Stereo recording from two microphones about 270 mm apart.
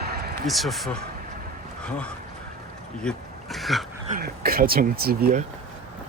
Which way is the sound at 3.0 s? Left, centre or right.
Centre.